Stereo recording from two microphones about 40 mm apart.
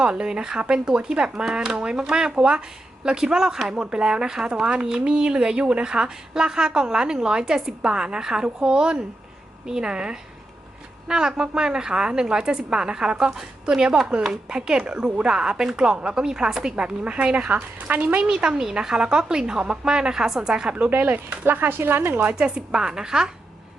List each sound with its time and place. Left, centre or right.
0.0 s a woman's voice: right
3.8 s a woman's voice: right
4.6 s a woman's voice: right
14.5 s a woman's voice: right
17.5 s speech: right
18.2 s a woman's voice: right
20.5 s a woman's voice: right
20.9 s speech: right
21.4 s speech: right
22.4 s a woman's voice: centre